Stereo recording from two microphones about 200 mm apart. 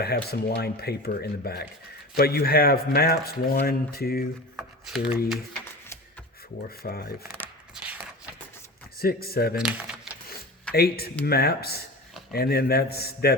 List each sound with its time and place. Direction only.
0.0 s speech: 50° left (ahead or behind)
4.5 s speech: 5° right (ahead or behind)
6.7 s speech: 50° left (ahead or behind)
7.2 s shuffling cards: 10° right (ahead or behind)
9.0 s speech: 50° left (ahead or behind)
9.6 s speech: 5° right (ahead or behind)
10.2 s a sound: 50° left (ahead or behind)
11.3 s speech: 50° left (ahead or behind)